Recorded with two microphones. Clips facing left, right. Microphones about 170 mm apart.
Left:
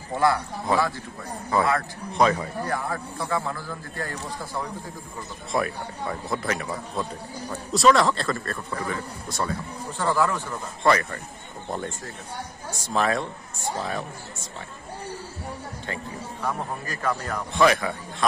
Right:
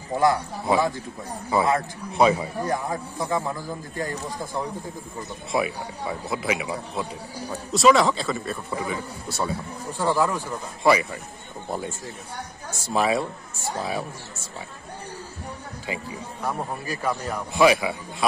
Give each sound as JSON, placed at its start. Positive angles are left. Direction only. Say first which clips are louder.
{"t": 0.2, "sound": "a man's voice", "louder": "right 1 dB", "side_deg": -15}
{"t": 2.1, "sound": "a man's voice", "louder": "right 2 dB", "side_deg": -10}
{"t": 5.5, "sound": "a man's voice", "louder": "right 1 dB", "side_deg": -5}
{"t": 12.8, "sound": "a man's voice", "louder": "right 2 dB", "side_deg": -10}
{"t": 16.4, "sound": "a man's voice", "louder": "right 1 dB", "side_deg": -10}